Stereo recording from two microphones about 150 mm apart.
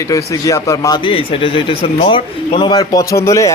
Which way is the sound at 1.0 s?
35° left (ahead or behind).